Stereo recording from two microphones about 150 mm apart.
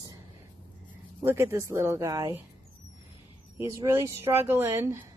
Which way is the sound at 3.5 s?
15° right (ahead or behind).